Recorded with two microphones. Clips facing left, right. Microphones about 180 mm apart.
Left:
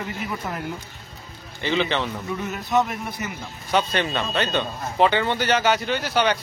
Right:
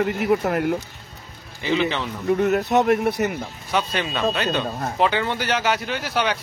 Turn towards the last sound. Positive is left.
turn(degrees=0)  # may be behind; listen again after turning